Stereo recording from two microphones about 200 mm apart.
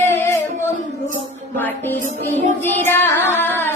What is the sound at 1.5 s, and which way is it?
Child singing, 10° left (ahead or behind).